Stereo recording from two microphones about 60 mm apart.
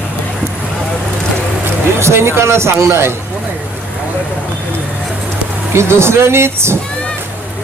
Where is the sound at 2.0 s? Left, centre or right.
Right.